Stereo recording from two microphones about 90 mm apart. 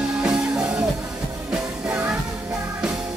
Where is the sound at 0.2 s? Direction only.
10° right (ahead or behind).